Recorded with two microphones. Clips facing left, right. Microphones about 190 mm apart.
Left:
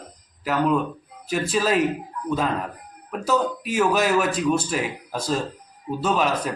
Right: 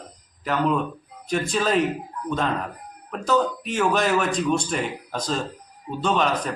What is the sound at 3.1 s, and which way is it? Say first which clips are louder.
Speech: right 1 dB; 5° left (ahead or behind).